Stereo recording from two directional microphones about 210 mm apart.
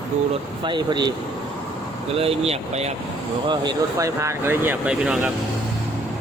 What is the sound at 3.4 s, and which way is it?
Speech, 20° right (ahead or behind).